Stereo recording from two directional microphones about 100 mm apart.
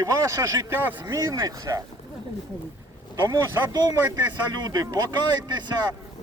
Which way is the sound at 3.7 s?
40° right (ahead or behind).